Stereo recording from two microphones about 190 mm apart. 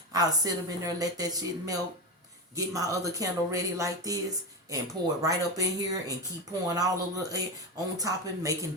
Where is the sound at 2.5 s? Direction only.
20° right (ahead or behind).